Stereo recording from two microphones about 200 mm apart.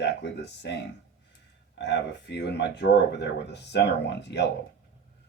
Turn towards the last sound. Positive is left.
turn(degrees=60)  # may be behind; listen again after turning